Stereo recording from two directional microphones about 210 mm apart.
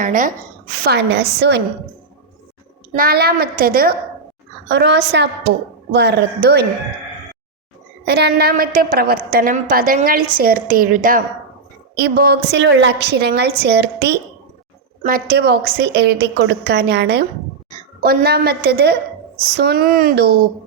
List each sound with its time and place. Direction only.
0.0 s a woman's voice: 40° right (ahead or behind)
0.9 s a woman's voice: 55° right (ahead or behind)
2.9 s a woman's voice: 45° right (ahead or behind)
8.0 s a woman's voice: 50° right (ahead or behind)